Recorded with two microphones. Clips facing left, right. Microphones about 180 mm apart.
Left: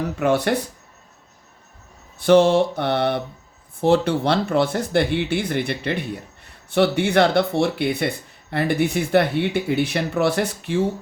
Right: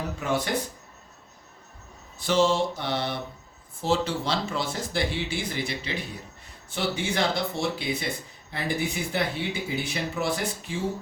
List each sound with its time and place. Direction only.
0.2 s speech: 65° left (ahead or behind)
2.1 s speech: 60° left (ahead or behind)